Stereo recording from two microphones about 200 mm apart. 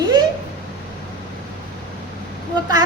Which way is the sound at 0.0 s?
20° right (ahead or behind).